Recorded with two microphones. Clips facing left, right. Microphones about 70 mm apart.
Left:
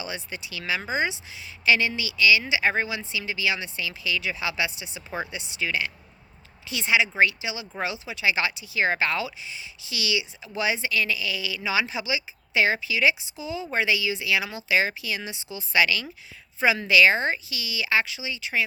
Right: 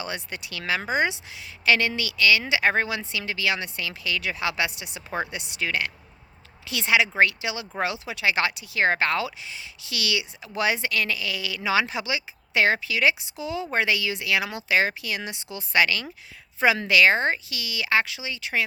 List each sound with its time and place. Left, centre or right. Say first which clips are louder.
0.0 s speech: right 1 dB; right
6.7 s speech: right 1 dB; right
7.2 s speech: right 1 dB; right